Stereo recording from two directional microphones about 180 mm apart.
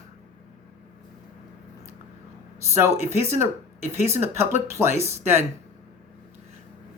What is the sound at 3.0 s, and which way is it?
Speech, 15° right (ahead or behind).